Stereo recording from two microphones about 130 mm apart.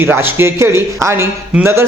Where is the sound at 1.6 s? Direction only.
20° right (ahead or behind).